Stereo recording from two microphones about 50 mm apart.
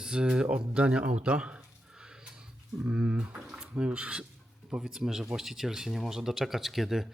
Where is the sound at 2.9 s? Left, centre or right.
Right.